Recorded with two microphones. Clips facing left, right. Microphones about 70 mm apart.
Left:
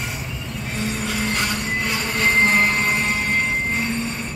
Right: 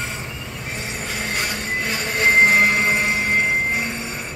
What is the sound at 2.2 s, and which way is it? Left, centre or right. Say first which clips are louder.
Train: right 3 dB; centre.